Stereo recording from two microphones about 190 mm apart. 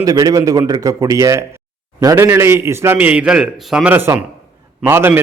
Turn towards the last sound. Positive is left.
turn(degrees=-10)  # may be behind; listen again after turning